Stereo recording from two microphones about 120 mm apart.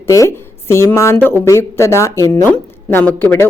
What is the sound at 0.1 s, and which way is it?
A woman's voice, 25° left (ahead or behind).